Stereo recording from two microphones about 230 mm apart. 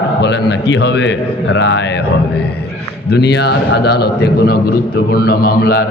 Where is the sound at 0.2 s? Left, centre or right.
Left.